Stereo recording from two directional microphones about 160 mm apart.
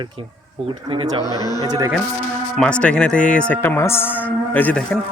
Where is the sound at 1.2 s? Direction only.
25° left (ahead or behind).